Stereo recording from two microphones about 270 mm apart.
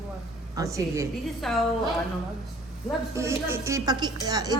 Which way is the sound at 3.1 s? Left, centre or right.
Centre.